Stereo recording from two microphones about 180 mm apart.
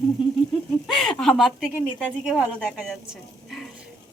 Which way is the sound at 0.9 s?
Centre (ahead or behind).